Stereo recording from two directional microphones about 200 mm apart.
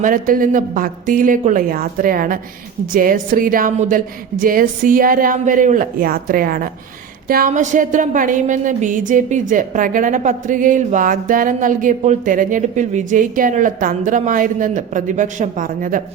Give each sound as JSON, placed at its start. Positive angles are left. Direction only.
{"t": 0.0, "sound": "a woman's voice", "side_deg": -45}